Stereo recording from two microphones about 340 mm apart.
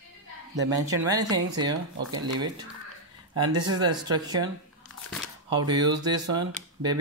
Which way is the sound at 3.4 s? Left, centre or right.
Centre.